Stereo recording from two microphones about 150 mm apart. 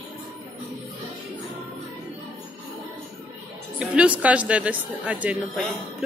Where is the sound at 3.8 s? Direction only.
10° right (ahead or behind).